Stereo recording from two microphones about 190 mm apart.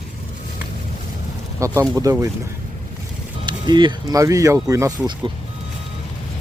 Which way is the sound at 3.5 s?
25° right (ahead or behind).